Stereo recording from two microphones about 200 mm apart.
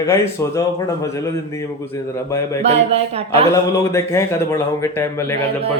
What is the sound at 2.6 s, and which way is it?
Speech, 30° right (ahead or behind).